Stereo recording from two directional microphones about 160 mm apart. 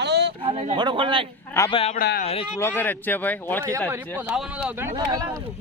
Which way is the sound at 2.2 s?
40° left (ahead or behind).